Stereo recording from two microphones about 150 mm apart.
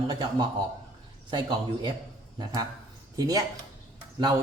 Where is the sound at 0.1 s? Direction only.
30° right (ahead or behind).